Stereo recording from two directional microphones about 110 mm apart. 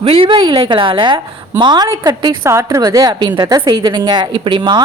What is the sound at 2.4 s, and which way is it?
A woman's voice, 25° right (ahead or behind).